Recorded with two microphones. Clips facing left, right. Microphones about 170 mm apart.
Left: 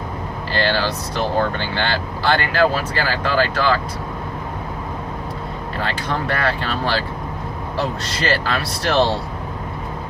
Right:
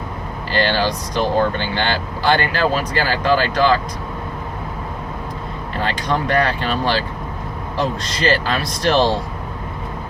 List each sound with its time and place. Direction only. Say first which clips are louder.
0.5 s speech: right 2 dB; 15° right (ahead or behind)
5.8 s speech: right 3 dB; 15° right (ahead or behind)